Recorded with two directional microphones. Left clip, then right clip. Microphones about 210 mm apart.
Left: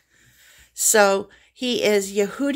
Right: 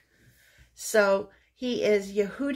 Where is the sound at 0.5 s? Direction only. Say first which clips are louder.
Left 9 dB; 55° left (ahead or behind).